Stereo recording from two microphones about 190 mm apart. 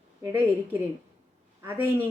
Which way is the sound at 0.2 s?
15° right (ahead or behind).